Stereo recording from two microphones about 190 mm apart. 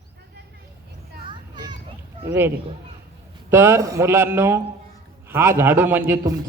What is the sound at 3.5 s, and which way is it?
A man's voice, 15° right (ahead or behind).